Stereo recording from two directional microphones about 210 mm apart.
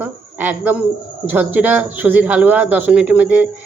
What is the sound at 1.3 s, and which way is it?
Speech, 10° right (ahead or behind).